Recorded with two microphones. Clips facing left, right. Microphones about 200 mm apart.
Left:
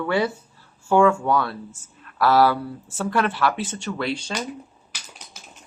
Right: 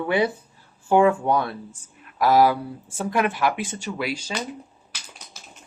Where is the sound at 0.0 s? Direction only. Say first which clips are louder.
Right 1 dB; 20° right (ahead or behind).